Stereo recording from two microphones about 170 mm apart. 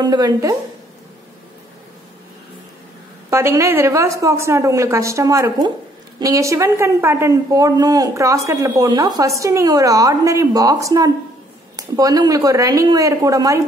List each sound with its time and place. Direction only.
0.0 s a woman's voice: 20° right (ahead or behind)
3.3 s a woman's voice: 15° right (ahead or behind)